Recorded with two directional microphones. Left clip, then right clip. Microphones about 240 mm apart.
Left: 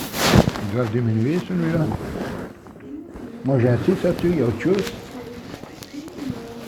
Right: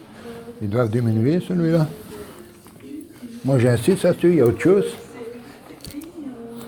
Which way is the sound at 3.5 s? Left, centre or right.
Right.